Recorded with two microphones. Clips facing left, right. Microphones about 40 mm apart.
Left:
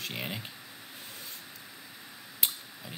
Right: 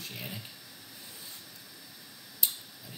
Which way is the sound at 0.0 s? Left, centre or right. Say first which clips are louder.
Left 5 dB; left.